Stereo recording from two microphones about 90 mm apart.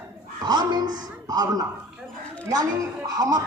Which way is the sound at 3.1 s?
45° right (ahead or behind).